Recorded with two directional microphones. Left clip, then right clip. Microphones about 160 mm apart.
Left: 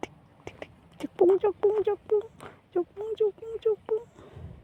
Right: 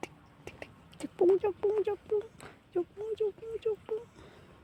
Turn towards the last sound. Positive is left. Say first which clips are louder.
# left 6 dB
turn(degrees=20)  # may be behind; listen again after turning